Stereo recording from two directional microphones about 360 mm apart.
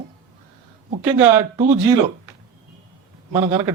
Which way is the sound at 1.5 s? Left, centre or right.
Centre.